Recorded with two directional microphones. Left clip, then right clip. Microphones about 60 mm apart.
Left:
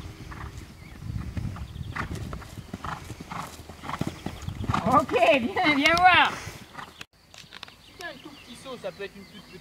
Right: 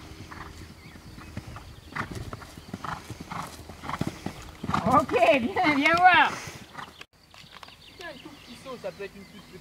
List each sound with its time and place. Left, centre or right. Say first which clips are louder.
1.3 s horse: left 2 dB; centre
4.6 s speech: even; centre
5.9 s speech: even; left
6.3 s horse: even; centre
8.6 s speech: left 1 dB; left